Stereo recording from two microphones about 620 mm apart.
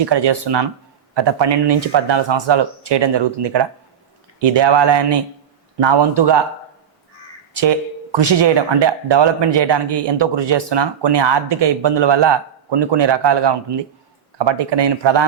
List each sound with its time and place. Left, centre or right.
0.0 s speech: right
7.5 s speech: right